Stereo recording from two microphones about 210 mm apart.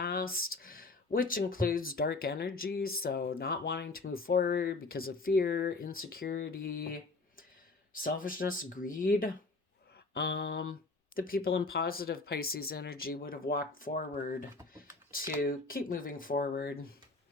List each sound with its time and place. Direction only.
0.0 s speech: 45° left (ahead or behind)